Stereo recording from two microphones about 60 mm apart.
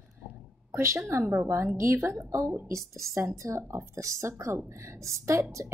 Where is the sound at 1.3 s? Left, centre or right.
Right.